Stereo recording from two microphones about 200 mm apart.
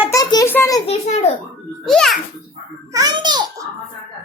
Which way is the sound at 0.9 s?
30° left (ahead or behind).